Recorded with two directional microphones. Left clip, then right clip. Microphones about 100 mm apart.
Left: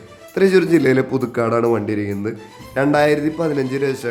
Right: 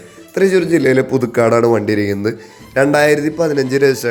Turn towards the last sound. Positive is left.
turn(degrees=-20)  # may be behind; listen again after turning